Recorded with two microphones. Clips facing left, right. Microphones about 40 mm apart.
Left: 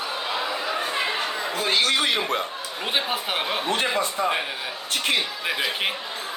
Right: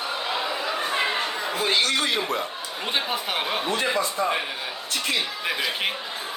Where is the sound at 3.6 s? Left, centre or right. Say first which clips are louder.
Left 1 dB; left.